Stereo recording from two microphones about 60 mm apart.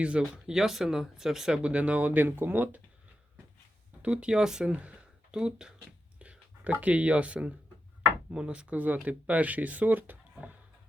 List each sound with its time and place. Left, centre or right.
0.2 s speech: centre; by 2.8 s right
4.0 s speech: centre
4.7 s speech: right